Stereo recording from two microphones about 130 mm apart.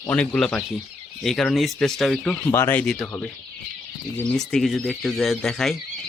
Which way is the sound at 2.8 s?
Centre (ahead or behind).